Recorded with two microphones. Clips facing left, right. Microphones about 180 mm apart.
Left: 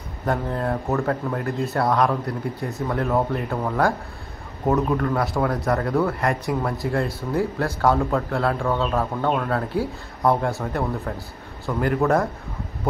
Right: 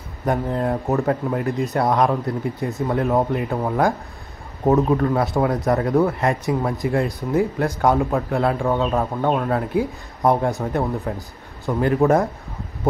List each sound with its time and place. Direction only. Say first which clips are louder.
0.2 s speech: right 3 dB; 15° right (ahead or behind)